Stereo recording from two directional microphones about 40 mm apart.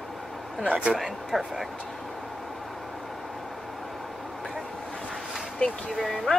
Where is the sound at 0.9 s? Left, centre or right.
Centre.